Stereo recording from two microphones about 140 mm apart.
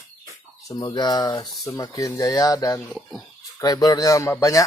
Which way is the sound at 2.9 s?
Centre (ahead or behind).